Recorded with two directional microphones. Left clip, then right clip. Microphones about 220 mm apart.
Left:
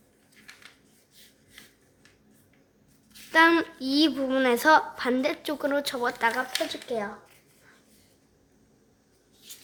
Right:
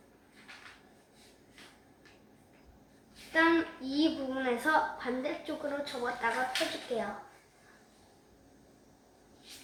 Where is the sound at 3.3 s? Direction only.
55° left (ahead or behind).